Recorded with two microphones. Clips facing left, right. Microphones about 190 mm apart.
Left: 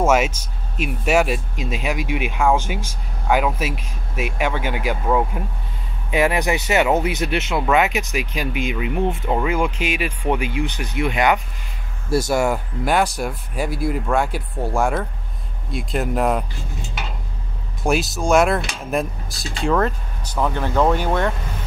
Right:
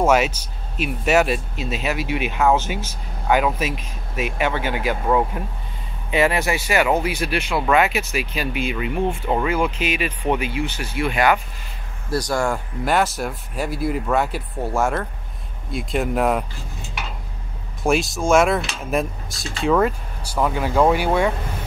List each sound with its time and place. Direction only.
0.0 s speech: 5° left (ahead or behind)
6.1 s speech: 15° left (ahead or behind)
12.3 s speech: 5° left (ahead or behind)
17.8 s speech: centre (ahead or behind)